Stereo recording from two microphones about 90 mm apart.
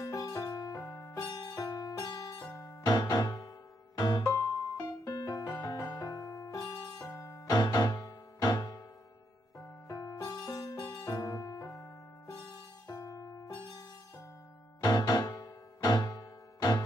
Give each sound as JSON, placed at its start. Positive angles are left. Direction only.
{"t": 0.0, "sound": "music", "side_deg": 40}
{"t": 1.3, "sound": "music", "side_deg": 45}
{"t": 7.4, "sound": "music", "side_deg": 50}
{"t": 9.8, "sound": "music", "side_deg": 40}
{"t": 12.8, "sound": "music", "side_deg": 40}
{"t": 14.8, "sound": "music", "side_deg": 50}